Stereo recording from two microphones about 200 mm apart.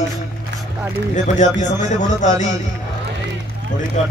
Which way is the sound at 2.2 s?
35° left (ahead or behind).